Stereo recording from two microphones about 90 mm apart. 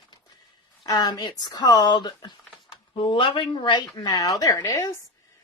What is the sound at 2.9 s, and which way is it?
Speech, 70° left (ahead or behind).